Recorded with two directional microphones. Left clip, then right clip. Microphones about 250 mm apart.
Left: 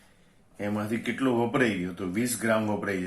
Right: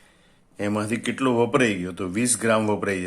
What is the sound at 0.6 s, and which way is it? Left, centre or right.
Speech, right.